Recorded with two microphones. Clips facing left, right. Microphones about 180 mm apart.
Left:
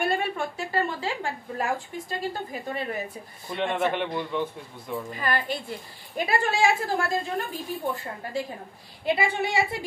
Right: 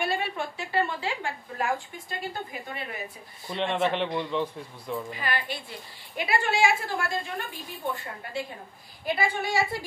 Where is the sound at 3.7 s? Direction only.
5° left (ahead or behind).